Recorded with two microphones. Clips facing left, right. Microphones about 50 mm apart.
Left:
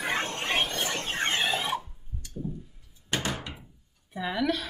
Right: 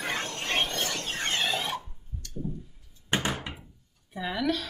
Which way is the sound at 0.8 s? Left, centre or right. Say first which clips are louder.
Left 2 dB; left.